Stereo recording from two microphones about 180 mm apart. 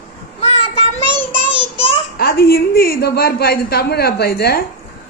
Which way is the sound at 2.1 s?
60° left (ahead or behind).